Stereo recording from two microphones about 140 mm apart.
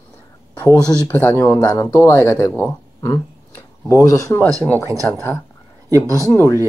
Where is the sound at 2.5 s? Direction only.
10° left (ahead or behind).